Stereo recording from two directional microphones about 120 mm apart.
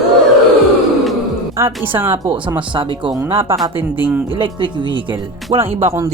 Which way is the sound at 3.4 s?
20° right (ahead or behind).